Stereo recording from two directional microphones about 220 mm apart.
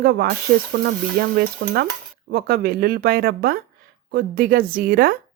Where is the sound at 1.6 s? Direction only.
55° right (ahead or behind).